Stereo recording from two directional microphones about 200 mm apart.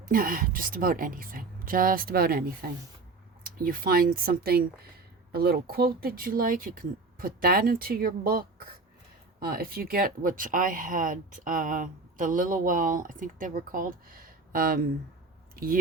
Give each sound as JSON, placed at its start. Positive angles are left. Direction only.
{"t": 0.1, "sound": "speech", "side_deg": -45}